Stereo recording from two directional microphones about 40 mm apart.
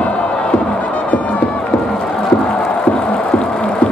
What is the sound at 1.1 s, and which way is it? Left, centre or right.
Crowd, left.